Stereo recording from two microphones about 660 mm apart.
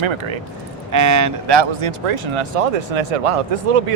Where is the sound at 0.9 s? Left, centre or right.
Right.